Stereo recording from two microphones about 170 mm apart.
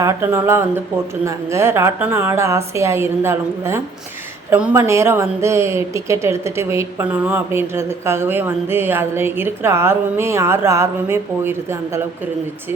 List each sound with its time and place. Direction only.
0.0 s a woman's voice: 15° right (ahead or behind)